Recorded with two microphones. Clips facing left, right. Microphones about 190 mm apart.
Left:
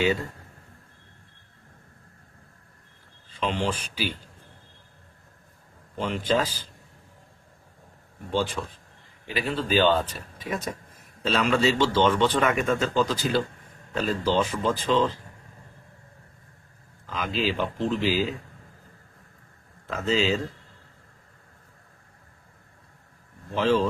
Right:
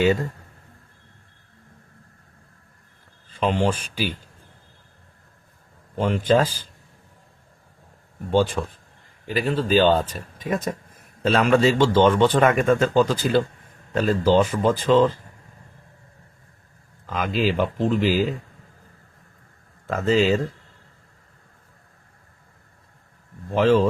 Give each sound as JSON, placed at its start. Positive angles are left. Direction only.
{"t": 3.2, "sound": "speech", "side_deg": -50}
{"t": 6.0, "sound": "speech", "side_deg": -50}
{"t": 8.3, "sound": "speech", "side_deg": -50}
{"t": 17.1, "sound": "speech", "side_deg": -50}
{"t": 19.9, "sound": "speech", "side_deg": -50}
{"t": 23.5, "sound": "speech", "side_deg": -50}